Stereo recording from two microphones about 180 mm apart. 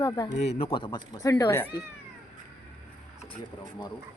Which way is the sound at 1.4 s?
15° left (ahead or behind).